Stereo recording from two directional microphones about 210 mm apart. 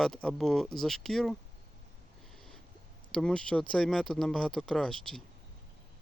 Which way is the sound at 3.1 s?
5° left (ahead or behind).